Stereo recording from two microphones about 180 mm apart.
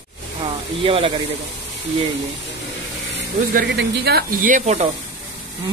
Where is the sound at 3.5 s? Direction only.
70° right (ahead or behind); by 4.8 s 40° right (ahead or behind).